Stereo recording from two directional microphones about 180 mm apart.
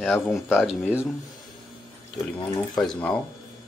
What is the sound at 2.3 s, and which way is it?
Speech, 25° left (ahead or behind).